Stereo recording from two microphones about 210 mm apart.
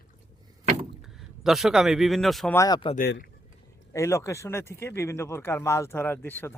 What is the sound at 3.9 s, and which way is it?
Speech, 15° left (ahead or behind).